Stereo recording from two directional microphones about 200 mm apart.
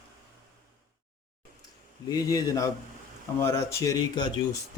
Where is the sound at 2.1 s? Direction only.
20° left (ahead or behind).